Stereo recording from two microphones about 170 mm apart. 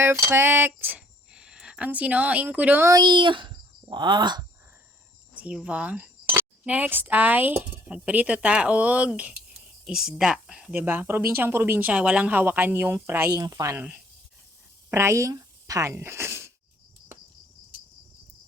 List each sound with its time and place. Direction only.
0.0 s speech: 15° right (ahead or behind)
5.3 s speech: 5° right (ahead or behind)